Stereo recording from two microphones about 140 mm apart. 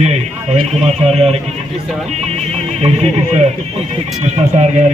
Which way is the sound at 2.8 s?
50° right (ahead or behind).